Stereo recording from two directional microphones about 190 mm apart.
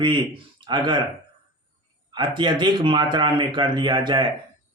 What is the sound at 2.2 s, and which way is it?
Speech, 25° right (ahead or behind).